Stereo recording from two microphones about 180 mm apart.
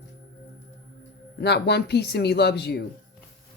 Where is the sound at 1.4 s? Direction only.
65° left (ahead or behind).